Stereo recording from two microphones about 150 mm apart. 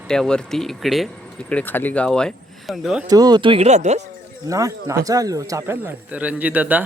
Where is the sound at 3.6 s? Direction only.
50° right (ahead or behind).